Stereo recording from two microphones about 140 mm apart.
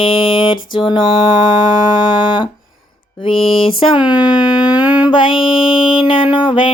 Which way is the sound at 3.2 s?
40° left (ahead or behind).